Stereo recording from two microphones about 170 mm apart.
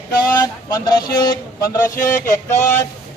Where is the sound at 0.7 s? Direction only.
20° left (ahead or behind).